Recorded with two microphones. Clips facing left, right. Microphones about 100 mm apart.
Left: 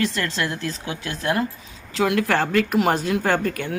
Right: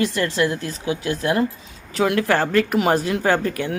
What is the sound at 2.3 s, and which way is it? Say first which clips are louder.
Speech: right 2 dB; 5° right (ahead or behind).